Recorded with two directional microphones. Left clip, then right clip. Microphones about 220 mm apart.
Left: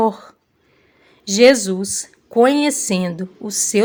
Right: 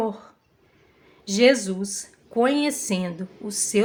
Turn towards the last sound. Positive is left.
turn(degrees=35)  # may be behind; listen again after turning